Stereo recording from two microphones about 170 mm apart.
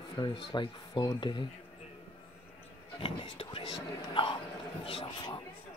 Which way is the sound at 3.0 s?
30° left (ahead or behind).